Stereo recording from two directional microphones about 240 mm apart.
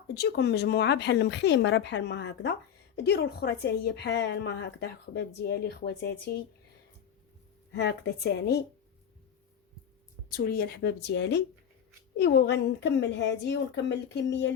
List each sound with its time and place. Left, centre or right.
0.1 s a woman's voice: left
7.7 s a woman's voice: left
10.3 s a woman's voice: left